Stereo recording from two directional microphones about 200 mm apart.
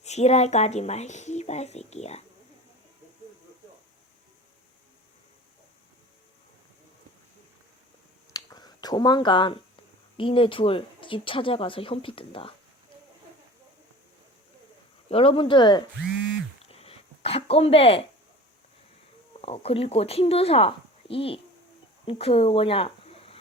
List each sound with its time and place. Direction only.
0.0 s speech: 35° left (ahead or behind)
8.3 s a sound: 20° left (ahead or behind)
10.2 s speech: 25° left (ahead or behind)
15.1 s speech: 30° left (ahead or behind)
16.6 s a sound: 30° left (ahead or behind)
19.3 s speech: 30° left (ahead or behind)